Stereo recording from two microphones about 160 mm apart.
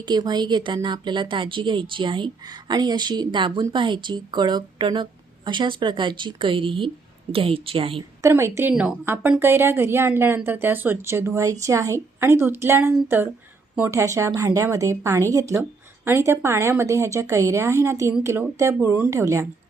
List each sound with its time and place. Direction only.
0.0 s a woman's voice: 25° right (ahead or behind)
8.2 s speech: 15° right (ahead or behind)